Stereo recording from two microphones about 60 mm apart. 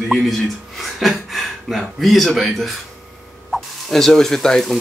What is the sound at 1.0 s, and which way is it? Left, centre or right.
Speech, centre.